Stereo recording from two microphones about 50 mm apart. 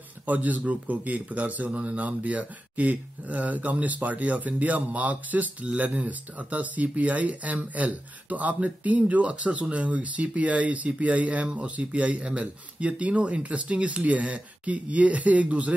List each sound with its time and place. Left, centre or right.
0.3 s a man's voice: right